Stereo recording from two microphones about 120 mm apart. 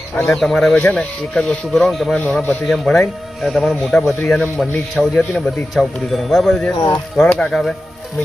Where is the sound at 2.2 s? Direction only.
10° left (ahead or behind).